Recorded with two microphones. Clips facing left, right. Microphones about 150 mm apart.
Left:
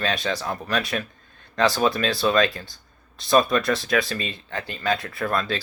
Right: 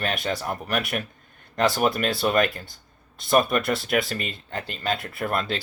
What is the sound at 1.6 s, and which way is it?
Speech, 90° left.